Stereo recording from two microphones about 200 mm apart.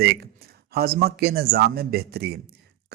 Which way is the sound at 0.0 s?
55° right (ahead or behind).